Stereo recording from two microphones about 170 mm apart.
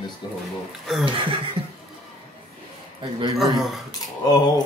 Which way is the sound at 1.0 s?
30° right (ahead or behind).